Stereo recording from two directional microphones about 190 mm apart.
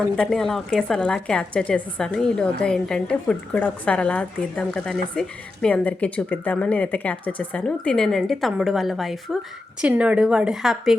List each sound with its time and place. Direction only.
0.2 s a woman's voice: centre (ahead or behind)